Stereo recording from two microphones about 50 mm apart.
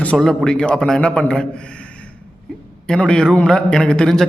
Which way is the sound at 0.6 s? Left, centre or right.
Left.